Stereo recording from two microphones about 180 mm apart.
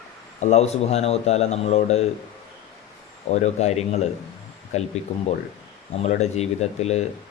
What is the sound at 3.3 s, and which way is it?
Speech, 40° left (ahead or behind).